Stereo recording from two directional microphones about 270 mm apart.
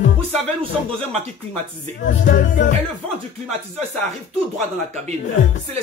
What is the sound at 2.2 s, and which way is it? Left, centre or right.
Music, left.